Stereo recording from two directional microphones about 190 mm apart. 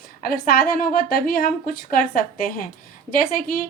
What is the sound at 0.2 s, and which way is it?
A woman's voice, 50° left (ahead or behind).